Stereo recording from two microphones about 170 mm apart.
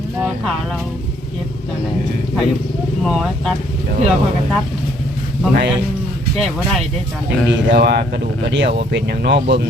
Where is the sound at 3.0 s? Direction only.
Centre (ahead or behind).